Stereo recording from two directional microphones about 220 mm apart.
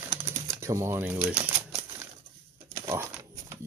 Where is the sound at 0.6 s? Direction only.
10° right (ahead or behind).